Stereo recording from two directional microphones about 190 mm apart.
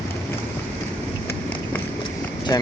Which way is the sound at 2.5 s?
20° left (ahead or behind).